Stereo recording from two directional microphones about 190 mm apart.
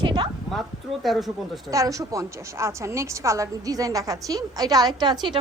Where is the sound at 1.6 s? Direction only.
20° right (ahead or behind).